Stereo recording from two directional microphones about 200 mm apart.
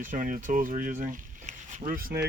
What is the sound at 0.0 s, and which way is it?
Speech, 40° right (ahead or behind).